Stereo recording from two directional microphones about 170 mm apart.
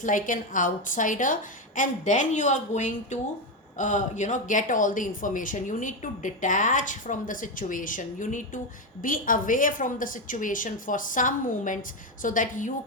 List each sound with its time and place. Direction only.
0.0 s speech: 50° left (ahead or behind)